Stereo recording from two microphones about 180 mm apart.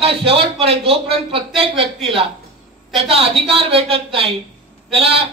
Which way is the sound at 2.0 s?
Centre (ahead or behind).